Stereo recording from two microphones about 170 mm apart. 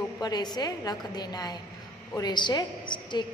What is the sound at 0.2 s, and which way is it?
A woman's voice, 25° left (ahead or behind).